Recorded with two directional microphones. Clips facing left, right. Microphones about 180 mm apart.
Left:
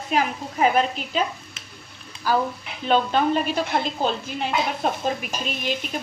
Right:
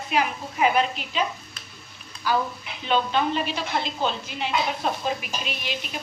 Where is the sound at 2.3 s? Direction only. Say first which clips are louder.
Left 2 dB; 40° left (ahead or behind).